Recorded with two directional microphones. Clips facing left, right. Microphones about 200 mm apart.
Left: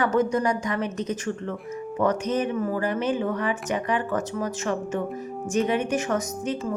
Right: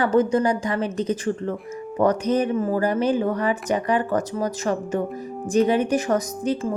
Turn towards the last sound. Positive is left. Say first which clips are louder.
# right 4 dB
turn(degrees=-35)  # may be behind; listen again after turning